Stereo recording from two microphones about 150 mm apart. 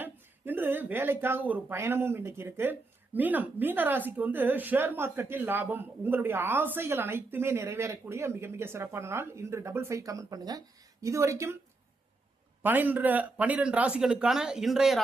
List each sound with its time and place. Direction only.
0.0 s a woman's voice: 15° right (ahead or behind)
12.6 s a woman's voice: 10° right (ahead or behind)